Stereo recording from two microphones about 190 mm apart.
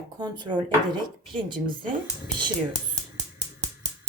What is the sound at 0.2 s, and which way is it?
A woman's voice, 25° right (ahead or behind).